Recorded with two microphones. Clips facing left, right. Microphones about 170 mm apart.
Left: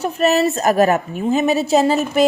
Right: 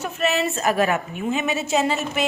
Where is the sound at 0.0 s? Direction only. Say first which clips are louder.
Left 7 dB; 40° left (ahead or behind).